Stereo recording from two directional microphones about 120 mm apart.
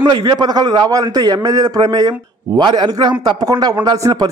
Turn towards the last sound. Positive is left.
turn(degrees=-30)  # may be behind; listen again after turning